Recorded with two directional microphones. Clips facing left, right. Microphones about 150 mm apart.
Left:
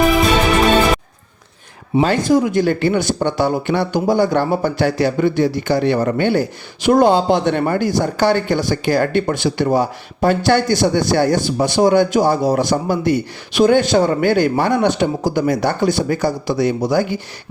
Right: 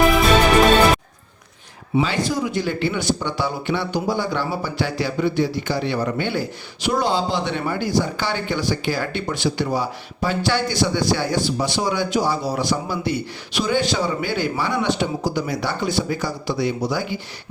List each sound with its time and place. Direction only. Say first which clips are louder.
2.0 s speech: left 7 dB; 50° left (ahead or behind)